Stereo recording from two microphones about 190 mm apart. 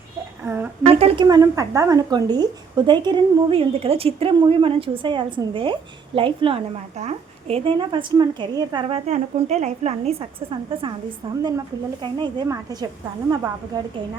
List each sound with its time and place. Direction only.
0.4 s a woman's voice: 10° right (ahead or behind)
0.9 s a woman's voice: 30° right (ahead or behind)
12.0 s speech: 25° right (ahead or behind)